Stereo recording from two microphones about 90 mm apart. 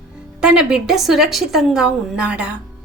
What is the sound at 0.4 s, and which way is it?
A woman's voice, 5° right (ahead or behind).